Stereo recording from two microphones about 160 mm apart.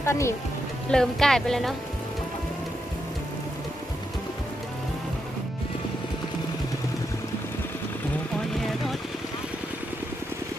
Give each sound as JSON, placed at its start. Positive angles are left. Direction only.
{"t": 0.0, "sound": "speech", "side_deg": 15}
{"t": 0.9, "sound": "a woman's voice", "side_deg": 5}